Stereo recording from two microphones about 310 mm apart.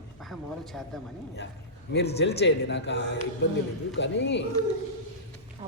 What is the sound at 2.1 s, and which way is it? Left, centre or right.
Speech, left.